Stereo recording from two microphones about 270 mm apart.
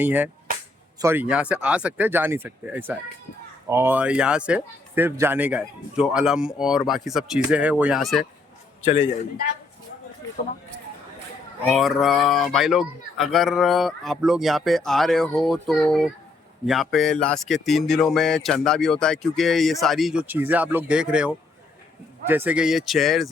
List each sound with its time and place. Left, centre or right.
0.0 s speech: centre
8.8 s a man's voice: left
11.6 s speech: centre